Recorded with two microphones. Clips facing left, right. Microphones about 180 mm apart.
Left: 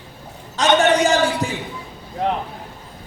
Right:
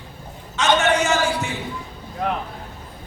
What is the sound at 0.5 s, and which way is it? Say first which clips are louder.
Speech: left 3 dB; 35° left (ahead or behind).